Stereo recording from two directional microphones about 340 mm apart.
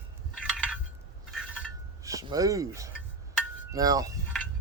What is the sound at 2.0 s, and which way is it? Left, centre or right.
Speech, centre.